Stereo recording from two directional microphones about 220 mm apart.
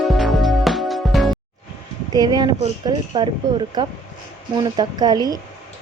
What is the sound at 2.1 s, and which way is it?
Speech, 20° right (ahead or behind).